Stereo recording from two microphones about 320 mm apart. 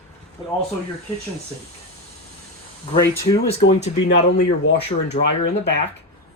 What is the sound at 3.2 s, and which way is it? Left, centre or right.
Speech, centre.